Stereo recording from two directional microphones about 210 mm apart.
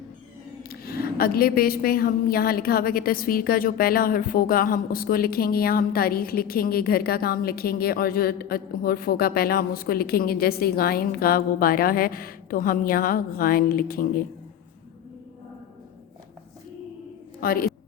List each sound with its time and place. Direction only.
0.7 s a woman's voice: 45° left (ahead or behind)
17.4 s a woman's voice: 45° left (ahead or behind)